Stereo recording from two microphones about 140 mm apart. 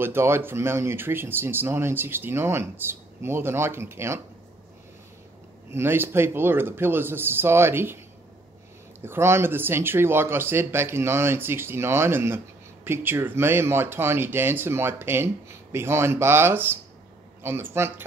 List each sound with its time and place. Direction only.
0.0 s speech: 15° right (ahead or behind)
5.7 s speech: 15° right (ahead or behind)
9.0 s speech: 20° right (ahead or behind)